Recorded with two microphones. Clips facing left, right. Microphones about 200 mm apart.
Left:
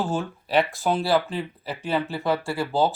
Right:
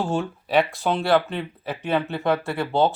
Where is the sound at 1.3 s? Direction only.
65° right (ahead or behind).